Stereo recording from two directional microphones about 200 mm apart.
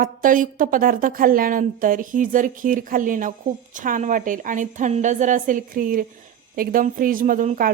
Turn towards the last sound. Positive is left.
turn(degrees=-40)  # may be behind; listen again after turning